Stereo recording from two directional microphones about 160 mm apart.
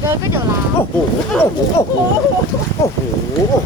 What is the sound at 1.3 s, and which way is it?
Speech, 15° left (ahead or behind).